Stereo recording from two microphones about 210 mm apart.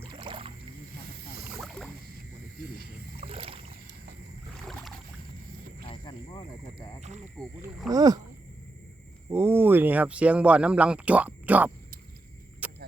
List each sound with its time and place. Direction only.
0.1 s a sound: 25° right (ahead or behind)
1.6 s rowboat: centre (ahead or behind)
3.2 s rowboat: 25° right (ahead or behind)
5.9 s wild animals: 20° left (ahead or behind)
7.9 s speech: 20° right (ahead or behind)
9.3 s speech: 10° right (ahead or behind)
12.6 s a sound: 5° right (ahead or behind)